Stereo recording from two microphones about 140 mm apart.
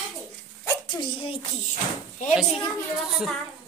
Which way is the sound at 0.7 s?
35° left (ahead or behind).